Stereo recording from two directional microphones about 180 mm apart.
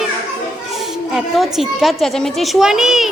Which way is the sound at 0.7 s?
Centre (ahead or behind).